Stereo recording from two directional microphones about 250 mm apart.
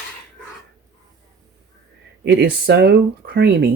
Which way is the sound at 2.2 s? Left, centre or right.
Right.